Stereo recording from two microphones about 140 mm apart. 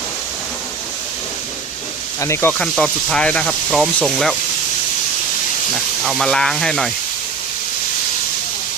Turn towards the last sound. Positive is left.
turn(degrees=0)  # may be behind; listen again after turning